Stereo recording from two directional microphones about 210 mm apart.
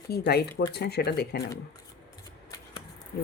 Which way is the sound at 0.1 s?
50° left (ahead or behind).